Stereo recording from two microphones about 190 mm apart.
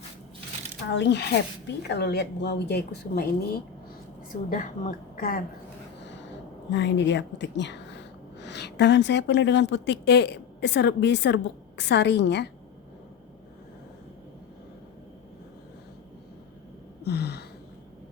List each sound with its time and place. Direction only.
0.9 s a woman's voice: 65° left (ahead or behind); by 5.4 s 45° left (ahead or behind)
6.7 s a woman's voice: 70° left (ahead or behind)
17.0 s gasp: 60° left (ahead or behind)